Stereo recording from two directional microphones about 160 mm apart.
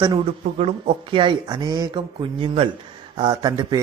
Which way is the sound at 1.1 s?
30° right (ahead or behind).